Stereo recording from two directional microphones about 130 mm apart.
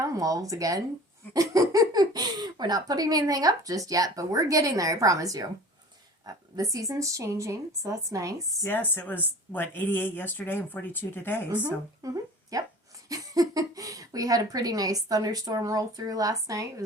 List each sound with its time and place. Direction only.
0.0 s speech: 25° right (ahead or behind)
8.6 s speech: 15° left (ahead or behind)
12.0 s speech: 25° right (ahead or behind)